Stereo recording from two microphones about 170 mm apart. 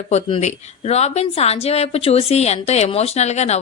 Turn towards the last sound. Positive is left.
turn(degrees=40)  # may be behind; listen again after turning